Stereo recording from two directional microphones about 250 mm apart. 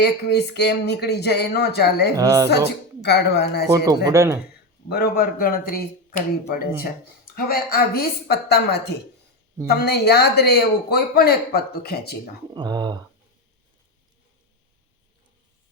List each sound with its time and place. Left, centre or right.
0.3 s speech: left
2.1 s speech: centre
3.0 s speech: left
3.7 s speech: centre
4.9 s speech: left
12.5 s speech: centre